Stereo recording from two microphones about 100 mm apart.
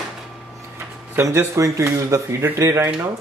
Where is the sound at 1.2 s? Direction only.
30° right (ahead or behind).